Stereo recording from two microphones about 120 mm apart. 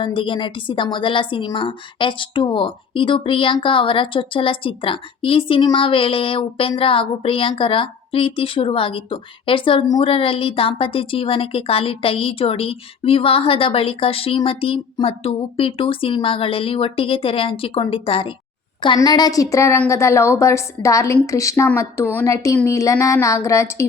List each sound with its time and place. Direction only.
0.0 s a woman's voice: 45° left (ahead or behind)
18.9 s a woman's voice: 35° left (ahead or behind)